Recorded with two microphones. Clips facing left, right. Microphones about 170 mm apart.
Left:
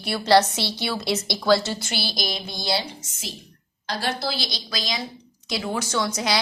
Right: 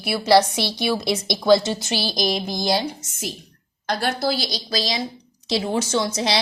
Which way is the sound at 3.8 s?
50° right (ahead or behind).